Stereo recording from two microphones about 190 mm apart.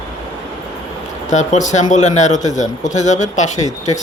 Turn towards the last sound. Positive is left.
turn(degrees=40)  # may be behind; listen again after turning